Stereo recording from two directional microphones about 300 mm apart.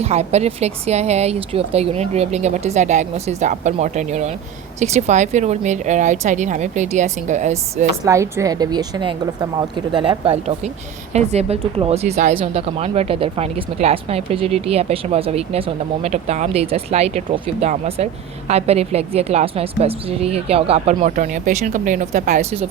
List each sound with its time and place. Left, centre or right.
0.0 s speech: right
8.0 s a woman's voice: centre